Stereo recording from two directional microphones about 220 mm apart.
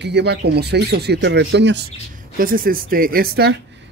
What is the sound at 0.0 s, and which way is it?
Speech, 50° right (ahead or behind).